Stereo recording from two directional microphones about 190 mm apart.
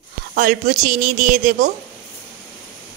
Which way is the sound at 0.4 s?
45° right (ahead or behind).